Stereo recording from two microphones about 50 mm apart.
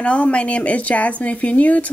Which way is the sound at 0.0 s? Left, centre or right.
Left.